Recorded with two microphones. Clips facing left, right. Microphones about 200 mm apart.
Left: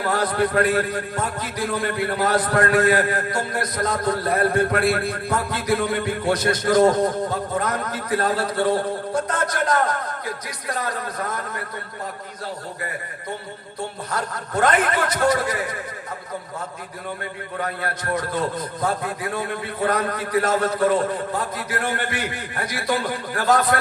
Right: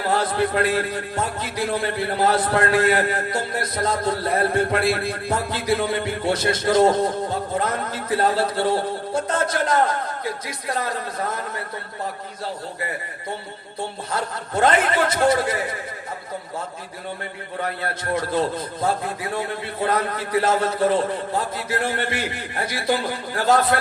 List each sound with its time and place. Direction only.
0.1 s a man's voice: 25° right (ahead or behind)
14.1 s a man's voice: 25° right (ahead or behind)
18.1 s a man's voice: 25° right (ahead or behind)